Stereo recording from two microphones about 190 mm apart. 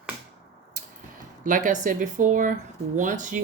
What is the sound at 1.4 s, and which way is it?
Speech, 45° right (ahead or behind).